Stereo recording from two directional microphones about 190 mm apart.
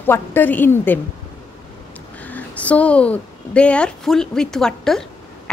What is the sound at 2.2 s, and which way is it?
A woman's voice, 10° left (ahead or behind).